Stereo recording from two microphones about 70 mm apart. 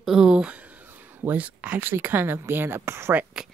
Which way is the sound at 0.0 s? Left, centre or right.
Centre.